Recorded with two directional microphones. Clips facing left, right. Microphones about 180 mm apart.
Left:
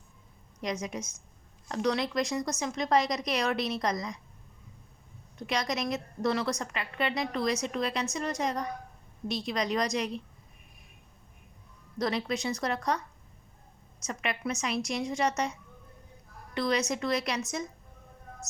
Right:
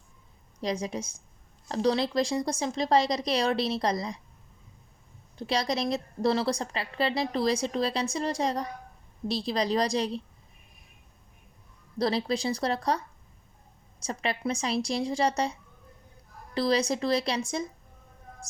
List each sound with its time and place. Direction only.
0.6 s a woman's voice: 30° right (ahead or behind)
5.4 s a woman's voice: 30° right (ahead or behind)
11.9 s a woman's voice: 30° right (ahead or behind)
14.0 s a woman's voice: 30° right (ahead or behind)
16.6 s a woman's voice: 30° right (ahead or behind)